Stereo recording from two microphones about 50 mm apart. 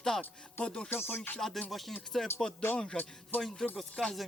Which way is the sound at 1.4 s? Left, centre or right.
Centre.